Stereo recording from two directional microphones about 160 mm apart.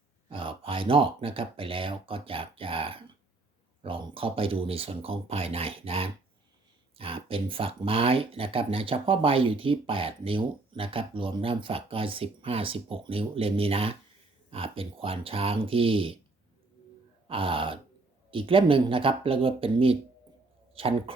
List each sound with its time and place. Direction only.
0.3 s speech: 35° right (ahead or behind)
17.2 s speech: 35° right (ahead or behind)